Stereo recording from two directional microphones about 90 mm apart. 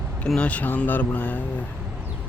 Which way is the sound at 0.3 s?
15° left (ahead or behind).